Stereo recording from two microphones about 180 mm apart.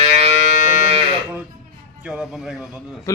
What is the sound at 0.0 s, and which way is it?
Music, 35° right (ahead or behind).